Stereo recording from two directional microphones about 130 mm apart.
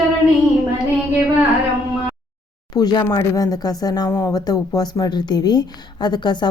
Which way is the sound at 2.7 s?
30° left (ahead or behind).